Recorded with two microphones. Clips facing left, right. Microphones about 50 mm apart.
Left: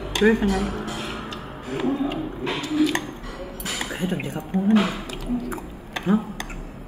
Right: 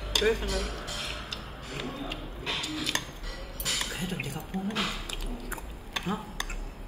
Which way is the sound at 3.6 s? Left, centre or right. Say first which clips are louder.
Left 5 dB; left.